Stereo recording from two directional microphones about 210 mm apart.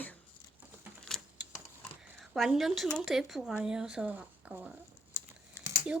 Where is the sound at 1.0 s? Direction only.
Centre (ahead or behind).